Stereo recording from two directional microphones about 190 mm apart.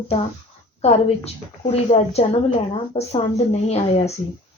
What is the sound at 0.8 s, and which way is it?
Speech, 35° left (ahead or behind).